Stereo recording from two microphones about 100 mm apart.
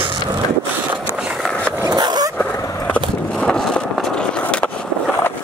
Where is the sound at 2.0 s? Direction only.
45° right (ahead or behind).